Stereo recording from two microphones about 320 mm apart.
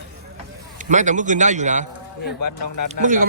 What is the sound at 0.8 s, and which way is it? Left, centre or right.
Speech, right.